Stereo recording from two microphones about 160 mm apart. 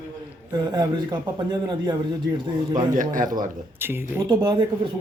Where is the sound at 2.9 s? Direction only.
55° right (ahead or behind).